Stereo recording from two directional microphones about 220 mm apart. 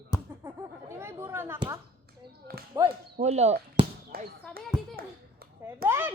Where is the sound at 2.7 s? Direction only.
15° right (ahead or behind).